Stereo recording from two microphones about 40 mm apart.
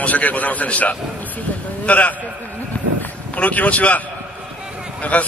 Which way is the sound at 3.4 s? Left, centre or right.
Left.